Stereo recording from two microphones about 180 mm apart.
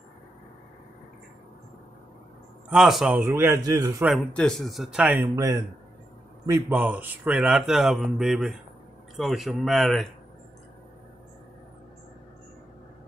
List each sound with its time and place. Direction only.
2.7 s a man's voice: centre (ahead or behind); by 4.0 s 20° right (ahead or behind)
4.0 s speech: centre (ahead or behind)
5.3 s a man's voice: 20° right (ahead or behind); by 10.0 s centre (ahead or behind)